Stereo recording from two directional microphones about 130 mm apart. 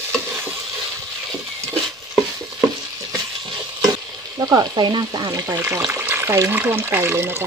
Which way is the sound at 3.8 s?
25° right (ahead or behind).